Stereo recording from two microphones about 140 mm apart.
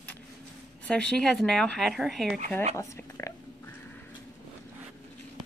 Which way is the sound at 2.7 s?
20° left (ahead or behind).